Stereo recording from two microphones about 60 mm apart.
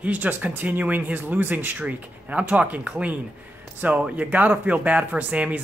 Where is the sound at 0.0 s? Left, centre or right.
Right.